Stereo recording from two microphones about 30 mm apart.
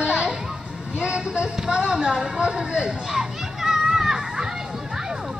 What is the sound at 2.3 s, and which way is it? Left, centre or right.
Children playing, right.